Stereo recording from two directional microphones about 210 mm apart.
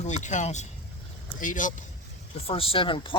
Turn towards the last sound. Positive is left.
turn(degrees=25)  # may be behind; listen again after turning